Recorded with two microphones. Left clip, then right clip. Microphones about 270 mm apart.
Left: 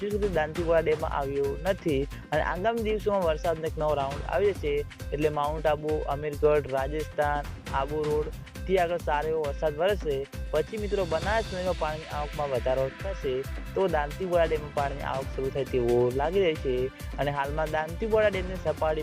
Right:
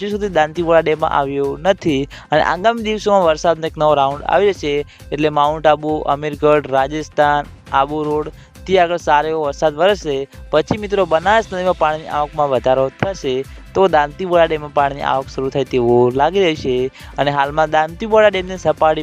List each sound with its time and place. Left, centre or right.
0.0 s speech: right